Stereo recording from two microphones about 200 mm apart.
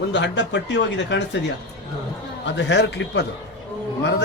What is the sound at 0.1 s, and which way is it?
A man's voice, 60° left (ahead or behind).